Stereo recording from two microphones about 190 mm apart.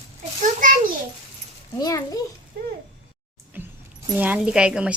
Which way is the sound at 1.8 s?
20° left (ahead or behind).